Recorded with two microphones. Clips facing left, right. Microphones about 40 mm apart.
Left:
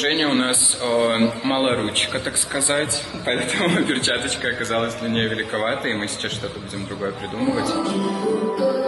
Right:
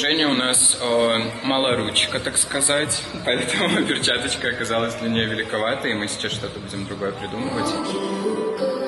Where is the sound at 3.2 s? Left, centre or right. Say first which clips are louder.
Even; centre.